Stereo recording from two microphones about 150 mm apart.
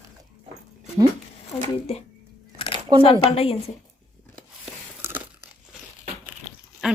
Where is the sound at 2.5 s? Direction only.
40° left (ahead or behind).